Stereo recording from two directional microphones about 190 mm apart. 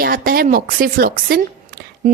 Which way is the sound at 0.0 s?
50° right (ahead or behind).